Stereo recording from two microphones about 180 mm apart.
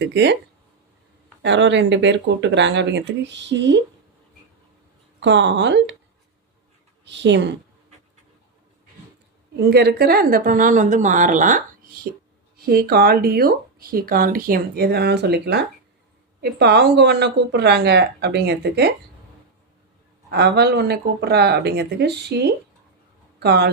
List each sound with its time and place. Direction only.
0.0 s speech: 70° right (ahead or behind)
1.4 s speech: 80° right
5.2 s speech: 85° right
7.0 s a woman's voice: 80° right
9.6 s a woman's voice: 65° right (ahead or behind); by 12.0 s 45° right (ahead or behind)
12.5 s speech: 60° right (ahead or behind)
20.3 s speech: 65° right (ahead or behind)